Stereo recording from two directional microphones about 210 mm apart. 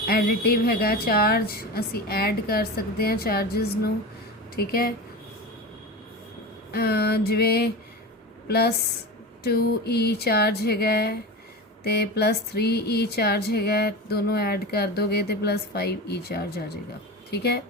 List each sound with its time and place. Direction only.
0.0 s speech: 45° left (ahead or behind)
6.7 s speech: 50° left (ahead or behind)